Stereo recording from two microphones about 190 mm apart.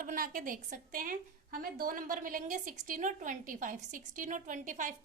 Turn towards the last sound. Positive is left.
turn(degrees=-40)  # may be behind; listen again after turning